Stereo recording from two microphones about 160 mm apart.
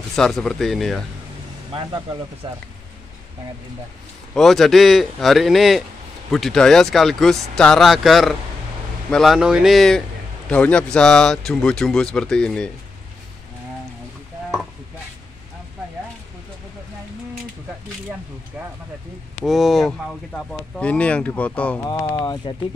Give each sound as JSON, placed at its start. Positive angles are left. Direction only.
{"t": 0.1, "sound": "speech", "side_deg": 0}
{"t": 2.4, "sound": "speech", "side_deg": -30}
{"t": 4.4, "sound": "speech", "side_deg": 0}
{"t": 19.4, "sound": "speech", "side_deg": 0}
{"t": 21.8, "sound": "speech", "side_deg": 20}